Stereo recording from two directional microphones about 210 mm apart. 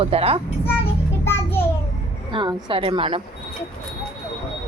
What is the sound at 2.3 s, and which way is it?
Speech, 20° right (ahead or behind).